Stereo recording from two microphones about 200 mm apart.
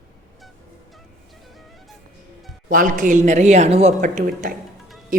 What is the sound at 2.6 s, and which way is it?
Music, 40° right (ahead or behind).